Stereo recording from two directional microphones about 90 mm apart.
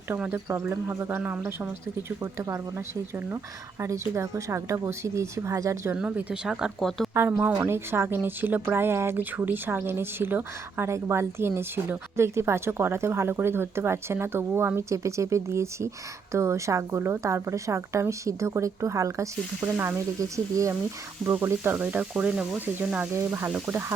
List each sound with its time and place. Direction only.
0.3 s a woman's voice: 30° right (ahead or behind)
1.2 s speech: 20° right (ahead or behind)
3.8 s a woman's voice: 35° right (ahead or behind)
6.0 s speech: 10° right (ahead or behind)
6.7 s speech: 5° left (ahead or behind)
7.1 s a woman's voice: 30° right (ahead or behind)
21.2 s speech: 20° right (ahead or behind)